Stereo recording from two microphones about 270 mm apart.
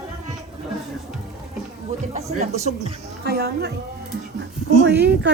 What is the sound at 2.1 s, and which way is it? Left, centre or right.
Speech, right.